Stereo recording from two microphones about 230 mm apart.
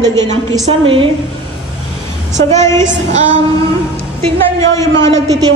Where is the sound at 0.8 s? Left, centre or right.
Right.